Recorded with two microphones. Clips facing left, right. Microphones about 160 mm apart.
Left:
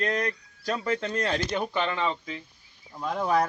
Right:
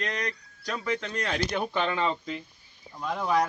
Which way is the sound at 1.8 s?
5° right (ahead or behind).